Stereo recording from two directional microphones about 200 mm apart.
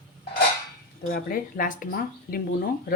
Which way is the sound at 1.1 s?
45° left (ahead or behind).